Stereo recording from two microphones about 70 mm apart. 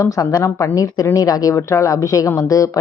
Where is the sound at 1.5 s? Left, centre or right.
Left.